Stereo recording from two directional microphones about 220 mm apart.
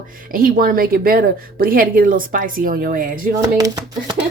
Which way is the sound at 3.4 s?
15° right (ahead or behind).